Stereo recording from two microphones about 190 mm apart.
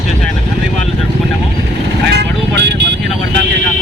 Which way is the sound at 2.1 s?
65° right (ahead or behind).